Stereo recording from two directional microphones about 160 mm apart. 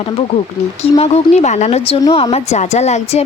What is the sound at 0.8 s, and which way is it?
Speech, 40° left (ahead or behind).